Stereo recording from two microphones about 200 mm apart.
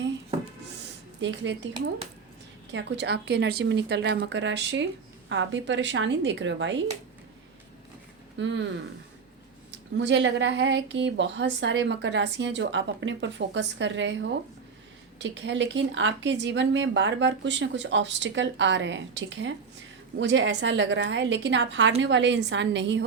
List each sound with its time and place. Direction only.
1.2 s speech: 65° right (ahead or behind)
2.7 s speech: 60° right (ahead or behind)
8.4 s speech: 65° right (ahead or behind)
9.7 s speech: 60° right (ahead or behind)